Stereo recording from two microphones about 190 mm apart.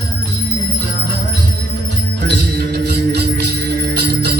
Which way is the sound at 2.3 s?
60° right (ahead or behind).